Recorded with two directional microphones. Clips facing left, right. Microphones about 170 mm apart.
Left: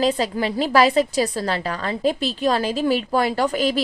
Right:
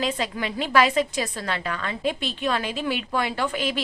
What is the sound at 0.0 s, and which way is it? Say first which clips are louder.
A woman's voice: left 6 dB; 35° left (ahead or behind).